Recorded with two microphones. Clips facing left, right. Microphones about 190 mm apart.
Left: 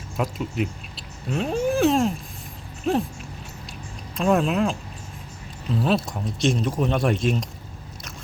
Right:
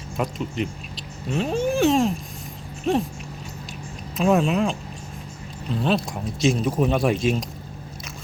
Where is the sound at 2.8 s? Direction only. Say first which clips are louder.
Right 1 dB; centre (ahead or behind).